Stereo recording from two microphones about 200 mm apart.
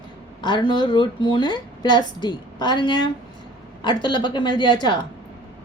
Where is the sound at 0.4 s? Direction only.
25° left (ahead or behind).